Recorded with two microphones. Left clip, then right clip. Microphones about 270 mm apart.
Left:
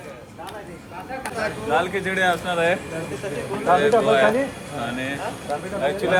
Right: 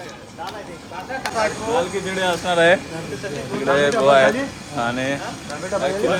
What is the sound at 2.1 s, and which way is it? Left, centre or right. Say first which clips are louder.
Speech: left 2 dB; centre.